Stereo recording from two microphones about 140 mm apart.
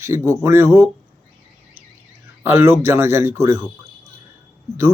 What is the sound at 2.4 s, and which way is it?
Speech, 15° right (ahead or behind).